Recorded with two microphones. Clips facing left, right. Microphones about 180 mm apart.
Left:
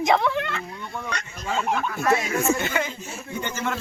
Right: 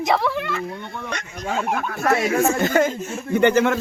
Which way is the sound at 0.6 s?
55° right (ahead or behind).